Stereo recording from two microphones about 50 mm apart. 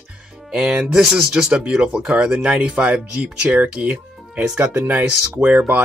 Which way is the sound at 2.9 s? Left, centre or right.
Right.